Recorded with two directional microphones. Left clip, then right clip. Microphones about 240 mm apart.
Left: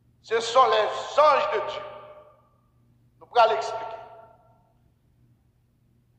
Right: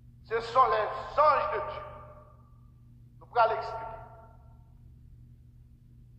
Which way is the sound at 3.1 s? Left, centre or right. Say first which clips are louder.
Left 6 dB; left.